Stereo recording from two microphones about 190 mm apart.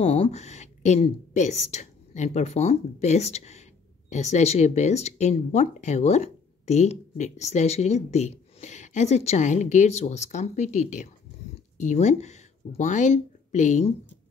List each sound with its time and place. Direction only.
0.0 s speech: 30° left (ahead or behind)